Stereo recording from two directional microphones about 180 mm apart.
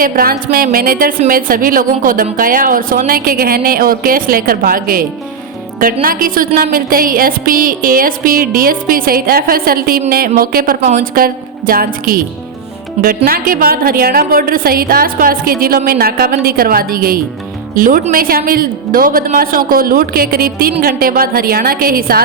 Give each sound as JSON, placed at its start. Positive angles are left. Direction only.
{"t": 0.0, "sound": "music", "side_deg": -55}
{"t": 13.0, "sound": "a woman's voice", "side_deg": -55}
{"t": 17.7, "sound": "music", "side_deg": -50}
{"t": 20.8, "sound": "a woman's voice", "side_deg": -55}